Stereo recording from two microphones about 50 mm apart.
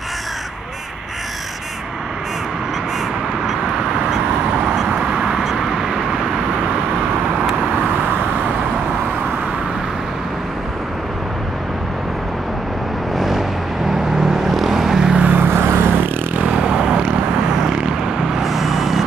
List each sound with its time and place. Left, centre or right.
4.8 s vehicle: centre
5.4 s vehicle: centre
13.9 s vehicle: centre
15.1 s vehicle: right
15.4 s vehicle: right
16.3 s vehicle: right; by 19.0 s centre